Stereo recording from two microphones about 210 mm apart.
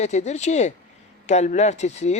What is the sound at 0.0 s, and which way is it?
Speech, 35° left (ahead or behind).